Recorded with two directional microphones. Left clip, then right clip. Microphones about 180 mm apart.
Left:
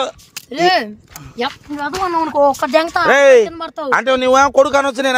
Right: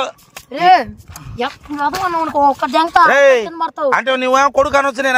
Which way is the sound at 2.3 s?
15° left (ahead or behind).